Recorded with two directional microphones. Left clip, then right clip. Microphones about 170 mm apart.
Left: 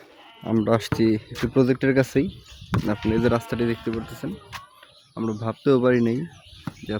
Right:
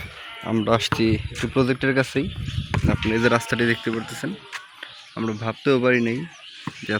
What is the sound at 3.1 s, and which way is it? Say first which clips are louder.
Speech: right 3 dB; 10° left (ahead or behind).